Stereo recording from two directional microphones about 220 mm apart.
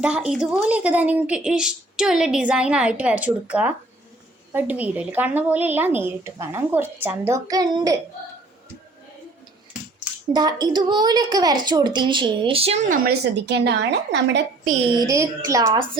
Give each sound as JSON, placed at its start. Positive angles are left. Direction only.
{"t": 0.0, "sound": "a woman's voice", "side_deg": -5}
{"t": 10.3, "sound": "a woman's voice", "side_deg": -20}
{"t": 13.1, "sound": "a woman's voice", "side_deg": -50}
{"t": 14.7, "sound": "a woman's voice", "side_deg": -25}